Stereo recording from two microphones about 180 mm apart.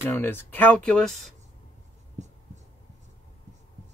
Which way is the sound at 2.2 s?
40° right (ahead or behind).